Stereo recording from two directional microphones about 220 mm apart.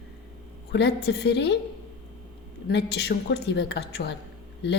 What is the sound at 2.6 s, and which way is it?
A woman's voice, 50° left (ahead or behind).